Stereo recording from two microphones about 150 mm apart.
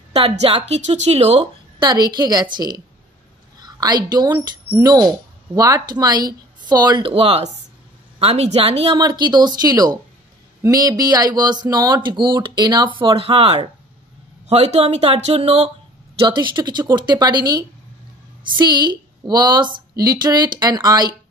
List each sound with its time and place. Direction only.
0.1 s a woman's voice: 40° right (ahead or behind)
1.8 s a woman's voice: 30° right (ahead or behind)
16.2 s speech: 30° right (ahead or behind)